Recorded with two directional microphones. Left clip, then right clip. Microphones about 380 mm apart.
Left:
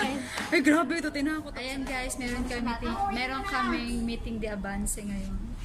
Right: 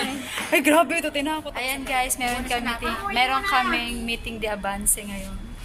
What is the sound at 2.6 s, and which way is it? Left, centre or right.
Speech, right.